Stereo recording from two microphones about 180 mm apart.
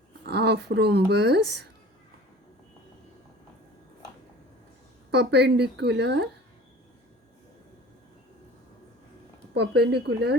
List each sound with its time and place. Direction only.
0.3 s speech: 65° right (ahead or behind)
5.1 s a woman's voice: 65° right (ahead or behind)
9.6 s speech: 65° right (ahead or behind)